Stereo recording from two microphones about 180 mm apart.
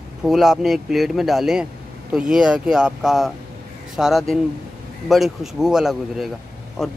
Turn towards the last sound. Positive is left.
turn(degrees=0)  # may be behind; listen again after turning